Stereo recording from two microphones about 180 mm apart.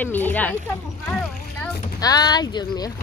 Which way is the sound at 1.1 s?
5° left (ahead or behind).